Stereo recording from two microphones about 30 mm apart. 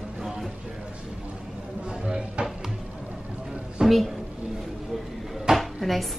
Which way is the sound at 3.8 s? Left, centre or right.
Right.